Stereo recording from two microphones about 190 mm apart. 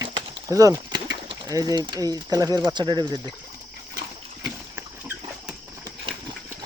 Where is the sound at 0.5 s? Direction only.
20° right (ahead or behind).